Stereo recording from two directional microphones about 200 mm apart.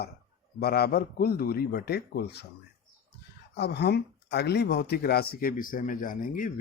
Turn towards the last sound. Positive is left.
turn(degrees=40)  # may be behind; listen again after turning